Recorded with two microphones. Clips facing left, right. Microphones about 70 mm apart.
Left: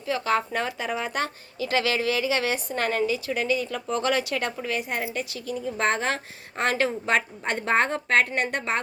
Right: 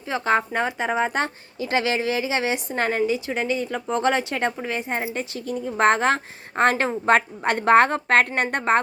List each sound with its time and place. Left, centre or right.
0.1 s speech: right
6.6 s a woman's voice: right